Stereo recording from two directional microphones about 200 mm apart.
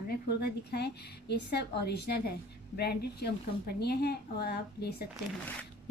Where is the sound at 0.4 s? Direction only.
55° left (ahead or behind).